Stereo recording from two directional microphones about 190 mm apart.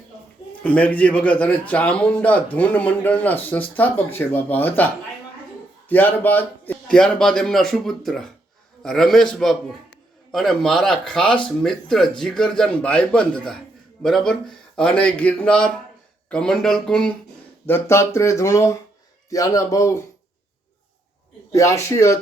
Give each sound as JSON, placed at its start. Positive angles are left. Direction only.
{"t": 0.6, "sound": "a man's voice", "side_deg": 10}
{"t": 5.9, "sound": "a man's voice", "side_deg": 10}
{"t": 21.5, "sound": "a man's voice", "side_deg": 15}